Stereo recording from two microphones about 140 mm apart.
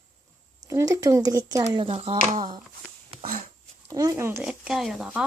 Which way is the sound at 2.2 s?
65° right (ahead or behind).